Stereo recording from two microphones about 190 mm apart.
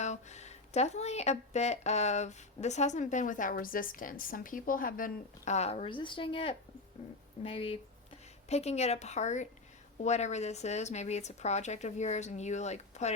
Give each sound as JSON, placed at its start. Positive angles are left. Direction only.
{"t": 0.0, "sound": "speech", "side_deg": 35}